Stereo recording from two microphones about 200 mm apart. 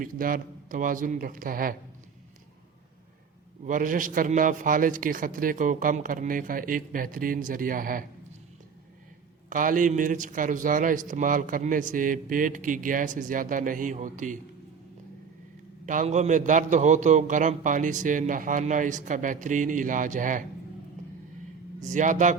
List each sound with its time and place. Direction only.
0.0 s a man's voice: 45° right (ahead or behind)
3.6 s a man's voice: 40° right (ahead or behind)
9.5 s a man's voice: 40° right (ahead or behind)
15.9 s a man's voice: 40° right (ahead or behind)
21.8 s a man's voice: 40° right (ahead or behind)